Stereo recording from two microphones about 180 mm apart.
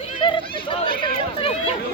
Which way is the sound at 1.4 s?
30° left (ahead or behind).